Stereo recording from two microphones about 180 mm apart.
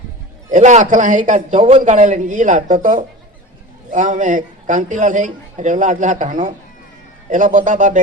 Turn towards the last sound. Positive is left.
turn(degrees=-45)  # may be behind; listen again after turning